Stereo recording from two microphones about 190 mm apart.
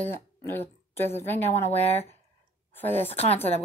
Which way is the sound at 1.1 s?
10° left (ahead or behind).